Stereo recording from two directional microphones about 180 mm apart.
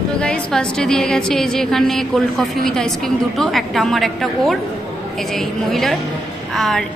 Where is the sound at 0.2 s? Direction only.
5° left (ahead or behind).